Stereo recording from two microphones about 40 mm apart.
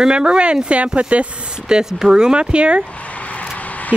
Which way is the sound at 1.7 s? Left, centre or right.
Centre.